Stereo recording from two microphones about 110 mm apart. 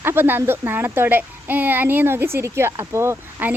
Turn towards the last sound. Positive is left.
turn(degrees=-20)  # may be behind; listen again after turning